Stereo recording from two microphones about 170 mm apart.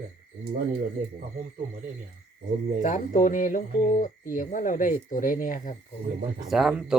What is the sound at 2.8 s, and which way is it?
Speech, 50° left (ahead or behind).